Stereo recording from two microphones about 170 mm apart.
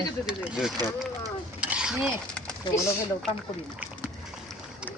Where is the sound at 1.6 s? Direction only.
5° right (ahead or behind).